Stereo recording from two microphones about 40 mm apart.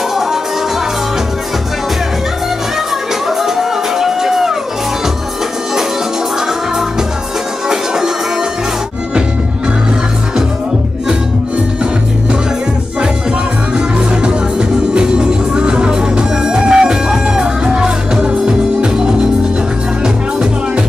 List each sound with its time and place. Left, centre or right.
0.1 s music: centre
3.3 s music: centre
7.6 s music: centre
13.7 s music: right
20.0 s music: right